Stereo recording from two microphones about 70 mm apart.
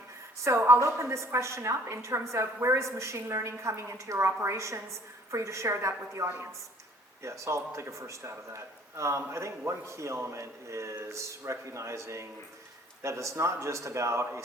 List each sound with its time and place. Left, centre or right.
0.4 s a woman's voice: right
6.2 s a woman's voice: right
7.2 s a woman's voice: right